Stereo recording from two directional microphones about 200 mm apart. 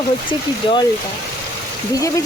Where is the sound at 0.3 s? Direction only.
25° left (ahead or behind).